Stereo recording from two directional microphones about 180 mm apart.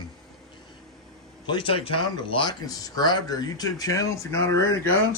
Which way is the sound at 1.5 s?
30° left (ahead or behind).